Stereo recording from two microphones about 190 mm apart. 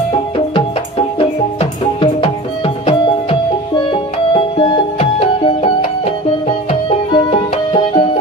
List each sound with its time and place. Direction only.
1.6 s music: 30° left (ahead or behind)